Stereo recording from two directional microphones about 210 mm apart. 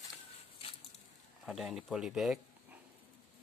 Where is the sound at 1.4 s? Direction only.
Centre (ahead or behind).